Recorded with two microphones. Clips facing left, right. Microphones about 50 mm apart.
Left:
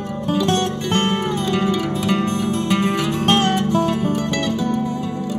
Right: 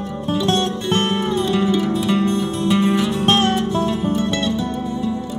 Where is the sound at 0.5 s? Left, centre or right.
Left.